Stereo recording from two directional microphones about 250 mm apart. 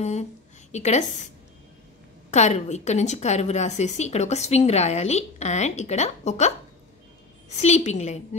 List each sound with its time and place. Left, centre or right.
0.0 s a woman's voice: left
2.3 s a woman's voice: left
7.6 s a woman's voice: left